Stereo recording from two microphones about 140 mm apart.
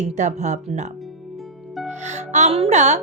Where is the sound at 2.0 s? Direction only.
55° right (ahead or behind).